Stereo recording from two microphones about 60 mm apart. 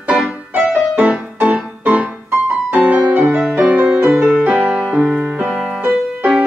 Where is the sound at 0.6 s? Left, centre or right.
Right.